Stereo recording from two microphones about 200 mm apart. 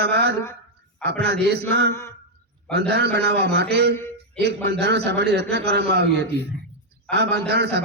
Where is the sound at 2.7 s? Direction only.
55° right (ahead or behind).